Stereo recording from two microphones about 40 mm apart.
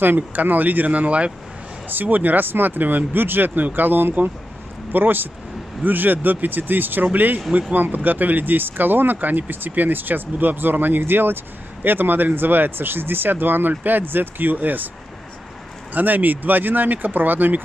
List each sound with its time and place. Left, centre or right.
0.0 s speech: right
1.9 s speech: right
15.9 s speech: right